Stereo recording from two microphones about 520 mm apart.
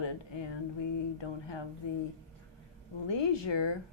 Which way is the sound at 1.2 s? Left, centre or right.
Left.